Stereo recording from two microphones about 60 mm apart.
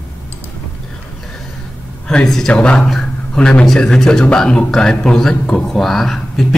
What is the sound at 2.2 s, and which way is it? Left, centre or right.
Speech, centre.